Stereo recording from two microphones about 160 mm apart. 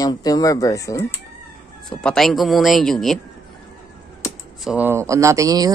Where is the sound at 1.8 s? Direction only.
Centre (ahead or behind).